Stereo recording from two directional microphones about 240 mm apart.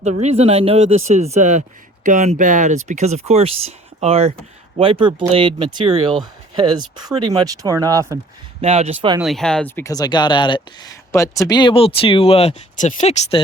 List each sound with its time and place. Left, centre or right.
0.0 s speech: right
8.6 s speech: right
9.2 s speech: centre; by 13.4 s left